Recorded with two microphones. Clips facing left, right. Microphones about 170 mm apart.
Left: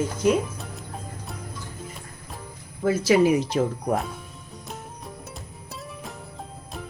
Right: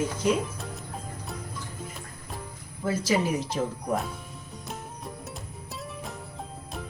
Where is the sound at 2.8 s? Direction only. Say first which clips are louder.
Left 7 dB; 70° left (ahead or behind).